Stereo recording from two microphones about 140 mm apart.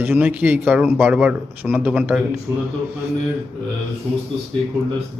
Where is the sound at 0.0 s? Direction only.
10° right (ahead or behind).